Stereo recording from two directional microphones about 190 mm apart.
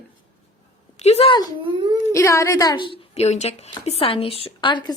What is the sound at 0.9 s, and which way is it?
Speech, 35° left (ahead or behind).